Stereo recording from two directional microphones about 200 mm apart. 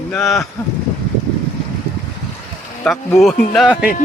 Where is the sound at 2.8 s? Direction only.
5° left (ahead or behind).